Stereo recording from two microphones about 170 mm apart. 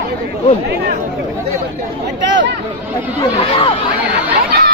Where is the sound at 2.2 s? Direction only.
90° right.